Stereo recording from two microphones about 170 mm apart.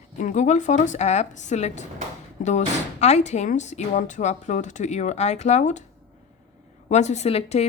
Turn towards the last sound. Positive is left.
turn(degrees=40)  # may be behind; listen again after turning